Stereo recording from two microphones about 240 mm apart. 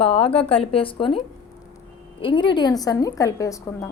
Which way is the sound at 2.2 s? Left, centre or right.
Centre.